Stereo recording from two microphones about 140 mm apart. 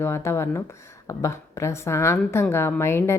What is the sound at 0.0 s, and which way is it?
A woman's voice, 20° left (ahead or behind).